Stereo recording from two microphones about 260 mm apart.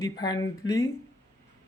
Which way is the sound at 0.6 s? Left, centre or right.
Left.